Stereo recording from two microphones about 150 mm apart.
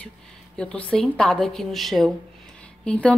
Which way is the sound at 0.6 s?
10° left (ahead or behind).